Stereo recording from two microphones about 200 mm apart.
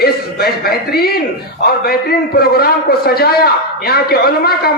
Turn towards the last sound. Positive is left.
turn(degrees=50)  # may be behind; listen again after turning